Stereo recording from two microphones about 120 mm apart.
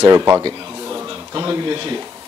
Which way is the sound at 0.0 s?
30° right (ahead or behind).